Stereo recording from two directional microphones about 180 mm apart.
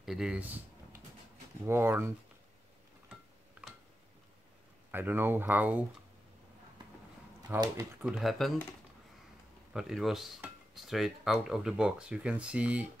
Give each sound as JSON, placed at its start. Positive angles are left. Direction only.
{"t": 0.0, "sound": "a sound", "side_deg": -5}
{"t": 1.7, "sound": "speech", "side_deg": -15}
{"t": 4.9, "sound": "speech", "side_deg": -10}
{"t": 7.5, "sound": "speech", "side_deg": -20}
{"t": 8.0, "sound": "speech", "side_deg": 0}
{"t": 9.7, "sound": "speech", "side_deg": 0}